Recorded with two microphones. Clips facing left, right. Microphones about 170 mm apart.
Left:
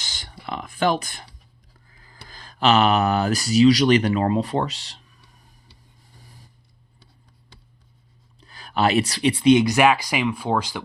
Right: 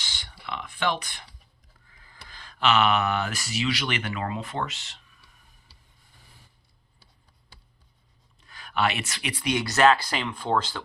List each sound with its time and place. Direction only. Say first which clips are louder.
0.0 s a sound: left 4 dB; 40° left (ahead or behind)
1.9 s speech: left 3 dB; 40° left (ahead or behind)
8.4 s speech: left 4 dB; 35° left (ahead or behind); by 10.8 s 10° left (ahead or behind)